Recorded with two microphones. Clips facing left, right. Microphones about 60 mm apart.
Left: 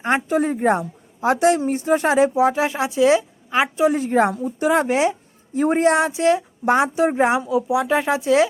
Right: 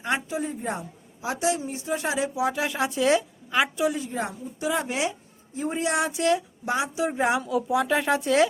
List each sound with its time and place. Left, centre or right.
0.0 s a woman's voice: left
3.9 s a woman's voice: left
5.5 s speech: left
5.8 s speech: left
6.7 s speech: left